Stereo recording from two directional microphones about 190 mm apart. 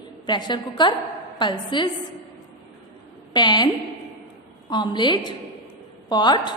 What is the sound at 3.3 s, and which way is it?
Speech, 20° left (ahead or behind).